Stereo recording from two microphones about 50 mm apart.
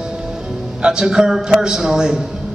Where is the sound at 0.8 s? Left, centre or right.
Centre.